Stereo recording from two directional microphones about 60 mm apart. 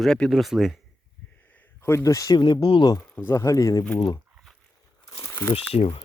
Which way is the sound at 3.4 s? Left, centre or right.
Left.